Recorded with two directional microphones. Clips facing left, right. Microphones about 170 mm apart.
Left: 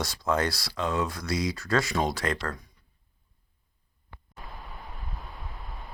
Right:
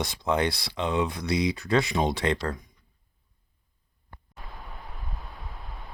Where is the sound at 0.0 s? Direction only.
20° right (ahead or behind).